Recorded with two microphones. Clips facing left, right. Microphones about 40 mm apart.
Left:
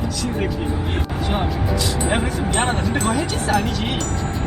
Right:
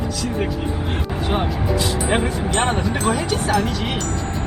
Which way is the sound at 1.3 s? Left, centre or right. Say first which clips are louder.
Right 2 dB; centre.